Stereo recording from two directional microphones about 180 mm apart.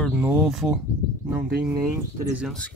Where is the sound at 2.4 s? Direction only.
5° left (ahead or behind).